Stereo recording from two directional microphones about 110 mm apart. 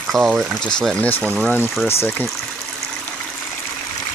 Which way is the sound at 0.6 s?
5° left (ahead or behind).